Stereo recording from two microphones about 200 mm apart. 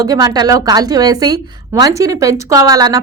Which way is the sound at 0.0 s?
15° right (ahead or behind).